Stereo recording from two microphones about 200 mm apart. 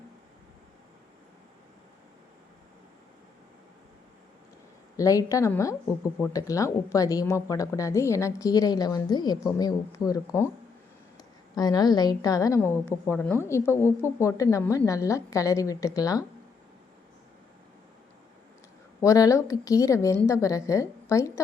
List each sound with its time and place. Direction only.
4.9 s speech: 15° left (ahead or behind)
19.0 s speech: 15° left (ahead or behind)